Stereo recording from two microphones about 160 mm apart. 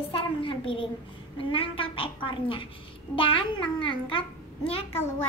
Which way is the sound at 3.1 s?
35° left (ahead or behind).